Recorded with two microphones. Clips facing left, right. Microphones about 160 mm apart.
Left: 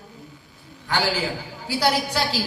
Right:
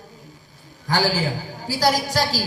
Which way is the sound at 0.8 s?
40° right (ahead or behind).